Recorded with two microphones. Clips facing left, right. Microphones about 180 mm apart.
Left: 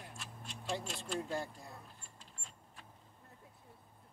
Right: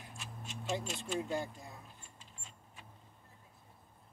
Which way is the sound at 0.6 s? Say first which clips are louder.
Right 2 dB; centre (ahead or behind).